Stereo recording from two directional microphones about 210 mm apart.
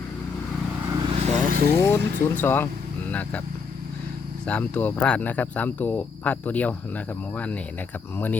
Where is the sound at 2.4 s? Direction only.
10° left (ahead or behind).